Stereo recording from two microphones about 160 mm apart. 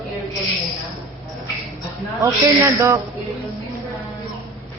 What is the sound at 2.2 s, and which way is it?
Speech, 15° right (ahead or behind).